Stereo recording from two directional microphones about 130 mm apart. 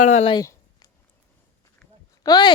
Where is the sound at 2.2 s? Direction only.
30° left (ahead or behind).